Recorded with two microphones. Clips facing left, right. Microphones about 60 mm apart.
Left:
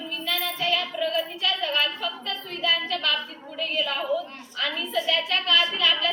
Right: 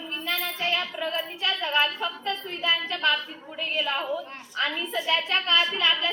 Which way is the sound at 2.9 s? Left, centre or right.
Right.